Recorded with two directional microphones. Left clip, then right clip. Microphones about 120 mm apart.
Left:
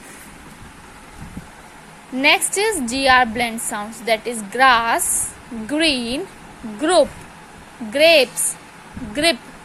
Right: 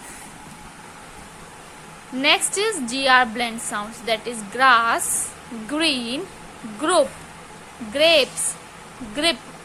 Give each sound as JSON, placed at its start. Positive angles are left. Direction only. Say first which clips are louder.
{"t": 2.1, "sound": "a woman's voice", "louder": "left 3 dB", "side_deg": 25}